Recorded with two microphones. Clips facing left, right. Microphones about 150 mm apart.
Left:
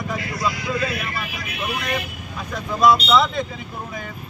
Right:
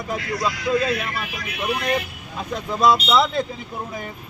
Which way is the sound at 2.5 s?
25° right (ahead or behind).